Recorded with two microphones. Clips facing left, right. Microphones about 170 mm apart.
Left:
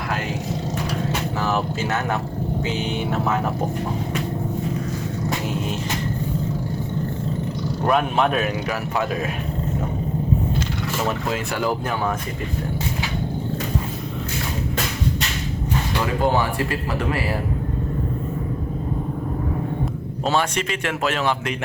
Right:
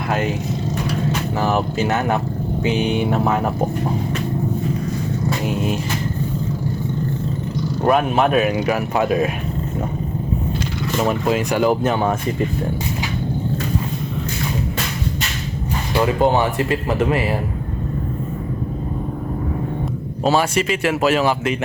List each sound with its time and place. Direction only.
1.4 s speech: 15° right (ahead or behind)
7.9 s speech: 5° right (ahead or behind)
11.3 s speech: 20° right (ahead or behind)
16.2 s speech: 20° right (ahead or behind)
20.2 s speech: 5° right (ahead or behind)